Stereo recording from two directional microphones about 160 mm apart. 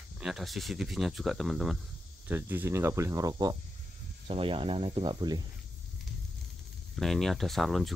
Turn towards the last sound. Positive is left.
turn(degrees=0)  # may be behind; listen again after turning